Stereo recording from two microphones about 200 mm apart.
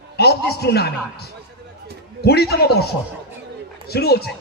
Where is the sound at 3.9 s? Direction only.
55° left (ahead or behind).